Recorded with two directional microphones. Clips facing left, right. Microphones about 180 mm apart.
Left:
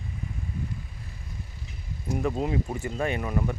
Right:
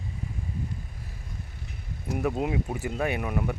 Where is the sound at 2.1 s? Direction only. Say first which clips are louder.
Even; 10° right (ahead or behind).